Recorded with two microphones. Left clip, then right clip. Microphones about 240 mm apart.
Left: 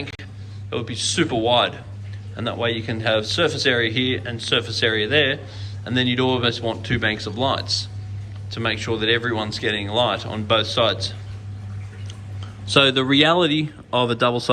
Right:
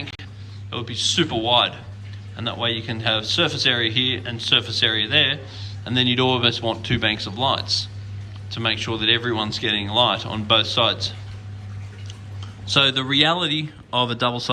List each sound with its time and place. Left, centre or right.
0.0 s a sound: centre
0.7 s speech: centre
12.6 s speech: centre